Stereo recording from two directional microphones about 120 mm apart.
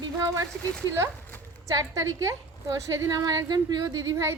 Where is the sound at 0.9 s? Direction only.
25° right (ahead or behind).